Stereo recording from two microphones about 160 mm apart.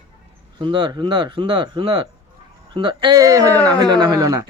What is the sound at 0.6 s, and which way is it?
Speech, 30° right (ahead or behind).